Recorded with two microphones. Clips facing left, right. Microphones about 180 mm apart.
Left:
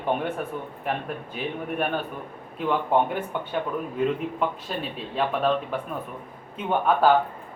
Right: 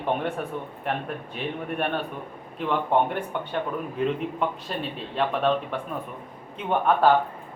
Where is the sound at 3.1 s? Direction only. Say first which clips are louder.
Left 1 dB; centre (ahead or behind).